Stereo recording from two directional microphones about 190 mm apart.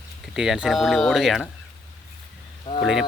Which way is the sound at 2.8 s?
Centre (ahead or behind).